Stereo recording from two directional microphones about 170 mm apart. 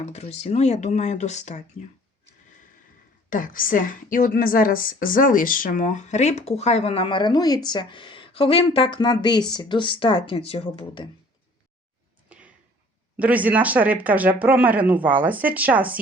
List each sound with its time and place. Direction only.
0.0 s speech: 40° left (ahead or behind)
3.2 s a woman's voice: 50° left (ahead or behind); by 11.1 s 30° left (ahead or behind)
13.1 s speech: 10° right (ahead or behind)